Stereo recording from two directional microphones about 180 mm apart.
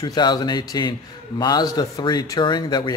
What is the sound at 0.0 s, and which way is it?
Speech, 25° left (ahead or behind).